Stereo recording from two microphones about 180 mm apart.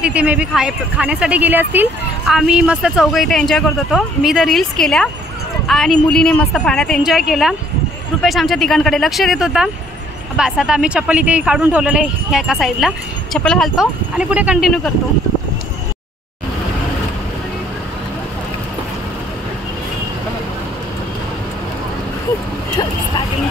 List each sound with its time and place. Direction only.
0.0 s a woman's voice: 5° right (ahead or behind)